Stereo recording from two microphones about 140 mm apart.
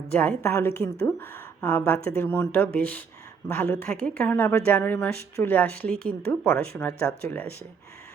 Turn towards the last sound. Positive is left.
turn(degrees=10)  # may be behind; listen again after turning